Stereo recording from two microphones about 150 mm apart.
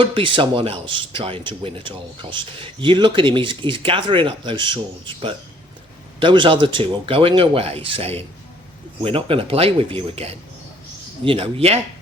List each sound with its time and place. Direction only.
0.0 s speech: 35° right (ahead or behind)